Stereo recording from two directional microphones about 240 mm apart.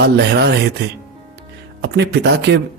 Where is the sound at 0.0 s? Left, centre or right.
Right.